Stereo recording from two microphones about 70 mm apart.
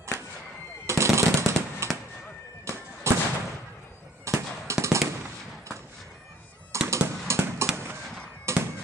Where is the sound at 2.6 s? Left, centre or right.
Right.